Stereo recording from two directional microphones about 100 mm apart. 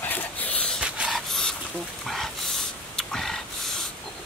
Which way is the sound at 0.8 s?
5° right (ahead or behind).